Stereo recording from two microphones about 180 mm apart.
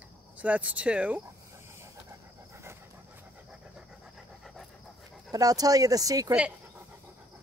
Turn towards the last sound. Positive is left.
turn(degrees=-20)  # may be behind; listen again after turning